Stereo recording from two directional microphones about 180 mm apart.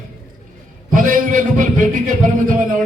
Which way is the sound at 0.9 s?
50° right (ahead or behind).